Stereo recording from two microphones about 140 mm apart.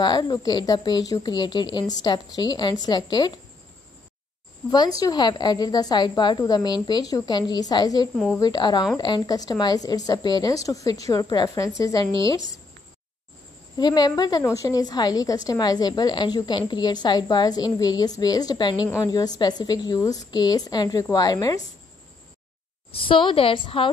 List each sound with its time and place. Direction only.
0.0 s a woman's voice: 30° left (ahead or behind)
4.6 s a woman's voice: 30° left (ahead or behind)
13.7 s a woman's voice: 30° left (ahead or behind)
22.8 s a woman's voice: 40° left (ahead or behind)